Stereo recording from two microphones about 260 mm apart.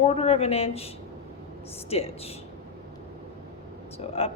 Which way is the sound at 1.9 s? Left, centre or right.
Left.